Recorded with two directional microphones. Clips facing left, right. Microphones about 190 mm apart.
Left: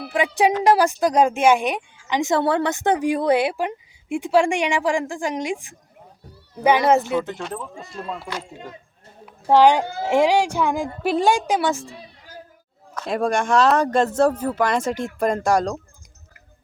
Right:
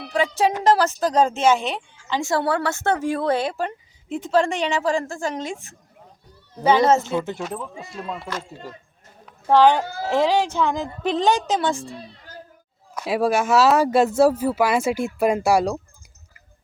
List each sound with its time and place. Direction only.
0.1 s a woman's voice: 15° left (ahead or behind)
7.3 s speech: 5° right (ahead or behind)
9.2 s a woman's voice: 15° left (ahead or behind)
11.9 s a sound: 10° left (ahead or behind)
12.9 s speech: 10° right (ahead or behind)